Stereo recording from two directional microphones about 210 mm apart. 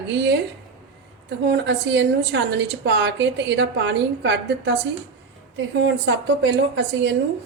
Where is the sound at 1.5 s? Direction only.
55° right (ahead or behind).